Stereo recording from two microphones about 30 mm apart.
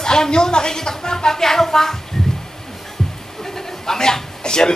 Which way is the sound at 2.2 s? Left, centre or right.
Centre.